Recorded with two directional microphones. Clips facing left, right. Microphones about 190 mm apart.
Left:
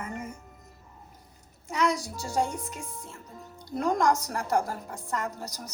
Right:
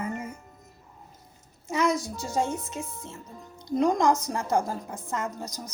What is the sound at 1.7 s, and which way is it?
A woman's voice, 25° right (ahead or behind).